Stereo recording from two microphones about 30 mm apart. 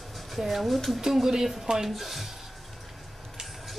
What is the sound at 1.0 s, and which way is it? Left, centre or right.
Speech, centre.